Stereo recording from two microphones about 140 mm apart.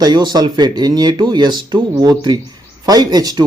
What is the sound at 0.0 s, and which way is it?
Speech, 30° right (ahead or behind).